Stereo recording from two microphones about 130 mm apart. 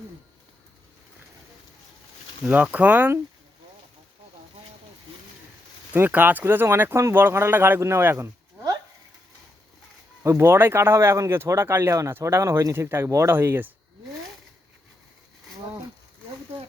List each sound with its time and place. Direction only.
2.4 s speech: 10° right (ahead or behind)
5.9 s speech: 15° right (ahead or behind)
10.2 s speech: 20° right (ahead or behind)